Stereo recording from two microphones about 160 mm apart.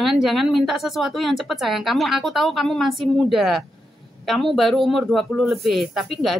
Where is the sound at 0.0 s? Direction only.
Centre (ahead or behind).